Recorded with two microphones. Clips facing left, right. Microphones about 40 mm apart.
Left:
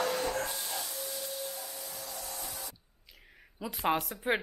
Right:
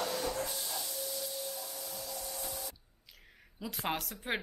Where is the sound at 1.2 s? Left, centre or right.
Left.